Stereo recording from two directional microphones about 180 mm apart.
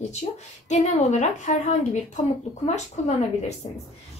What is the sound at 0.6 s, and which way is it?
Speech, 40° left (ahead or behind).